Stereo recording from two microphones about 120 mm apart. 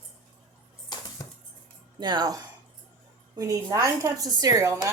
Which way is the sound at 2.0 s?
35° right (ahead or behind).